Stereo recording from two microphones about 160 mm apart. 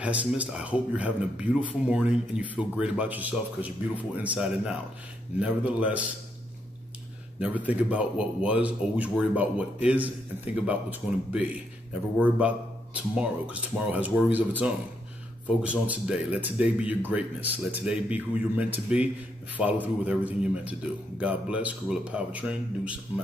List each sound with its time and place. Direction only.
0.0 s speech: 10° right (ahead or behind)
7.3 s speech: 10° right (ahead or behind)